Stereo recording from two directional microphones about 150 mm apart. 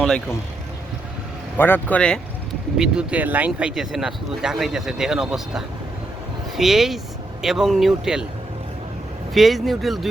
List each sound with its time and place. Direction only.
1.5 s speech: 15° left (ahead or behind)
2.7 s speech: 5° right (ahead or behind)
9.3 s speech: centre (ahead or behind)